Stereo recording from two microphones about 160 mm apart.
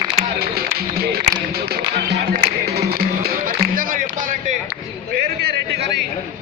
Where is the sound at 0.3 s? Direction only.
75° right (ahead or behind); by 4.5 s 55° right (ahead or behind).